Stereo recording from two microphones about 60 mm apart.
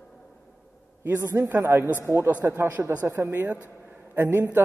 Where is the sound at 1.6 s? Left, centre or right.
Right.